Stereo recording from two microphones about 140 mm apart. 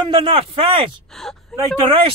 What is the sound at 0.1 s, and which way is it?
Speech, 40° right (ahead or behind).